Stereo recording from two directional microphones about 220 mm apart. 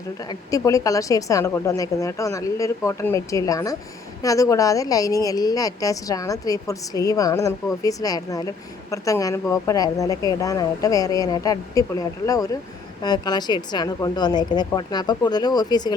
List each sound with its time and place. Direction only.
0.3 s a woman's voice: 15° left (ahead or behind)